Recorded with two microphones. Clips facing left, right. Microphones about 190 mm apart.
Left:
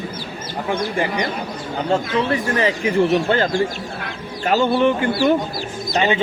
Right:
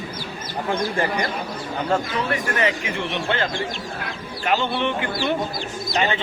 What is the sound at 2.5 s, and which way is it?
Speech, 35° left (ahead or behind).